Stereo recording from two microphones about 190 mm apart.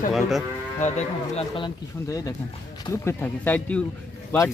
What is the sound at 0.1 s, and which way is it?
Speech, centre (ahead or behind).